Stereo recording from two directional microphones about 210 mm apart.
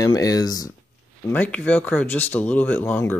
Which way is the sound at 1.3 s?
5° left (ahead or behind).